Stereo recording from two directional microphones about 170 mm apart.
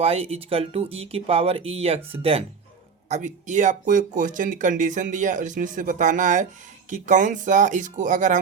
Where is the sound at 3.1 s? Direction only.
45° right (ahead or behind).